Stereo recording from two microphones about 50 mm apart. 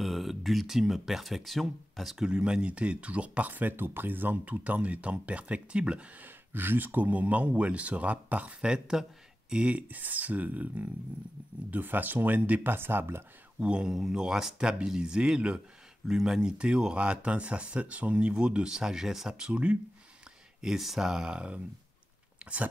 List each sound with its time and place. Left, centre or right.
0.0 s speech: centre
2.1 s speech: centre
6.2 s speech: right
12.6 s speech: right
13.6 s speech: right
13.8 s speech: centre
16.5 s speech: centre
19.5 s speech: right
20.6 s speech: centre; by 22.7 s right